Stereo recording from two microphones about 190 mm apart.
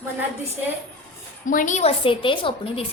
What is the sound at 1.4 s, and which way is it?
A woman's voice, 45° left (ahead or behind).